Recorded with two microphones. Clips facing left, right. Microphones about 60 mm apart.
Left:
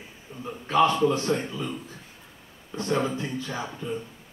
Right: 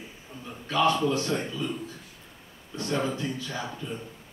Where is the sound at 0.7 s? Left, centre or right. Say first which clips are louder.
Left 3 dB; left.